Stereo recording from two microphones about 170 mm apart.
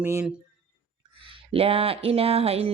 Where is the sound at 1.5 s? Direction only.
35° right (ahead or behind).